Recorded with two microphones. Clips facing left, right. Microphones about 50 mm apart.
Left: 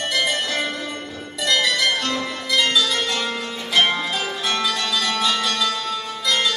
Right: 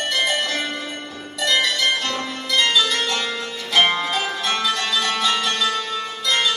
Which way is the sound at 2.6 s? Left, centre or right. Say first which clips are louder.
Right 3 dB; right.